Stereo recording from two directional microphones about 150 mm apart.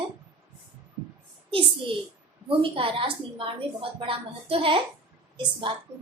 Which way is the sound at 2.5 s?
35° right (ahead or behind).